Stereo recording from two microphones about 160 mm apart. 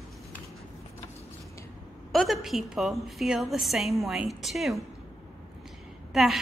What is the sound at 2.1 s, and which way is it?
A woman's voice, centre (ahead or behind).